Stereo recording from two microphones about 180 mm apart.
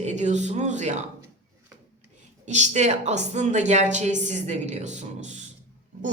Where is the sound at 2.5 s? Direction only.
40° right (ahead or behind).